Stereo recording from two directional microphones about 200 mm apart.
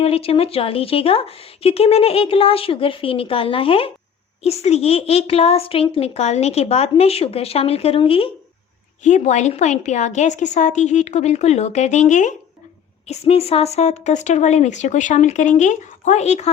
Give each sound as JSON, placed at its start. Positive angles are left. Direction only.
{"t": 0.0, "sound": "a woman's voice", "side_deg": 30}